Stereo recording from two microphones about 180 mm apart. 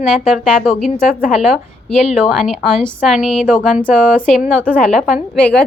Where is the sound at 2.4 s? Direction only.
5° left (ahead or behind).